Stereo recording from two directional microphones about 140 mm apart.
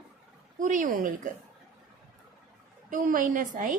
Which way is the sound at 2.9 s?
70° right (ahead or behind).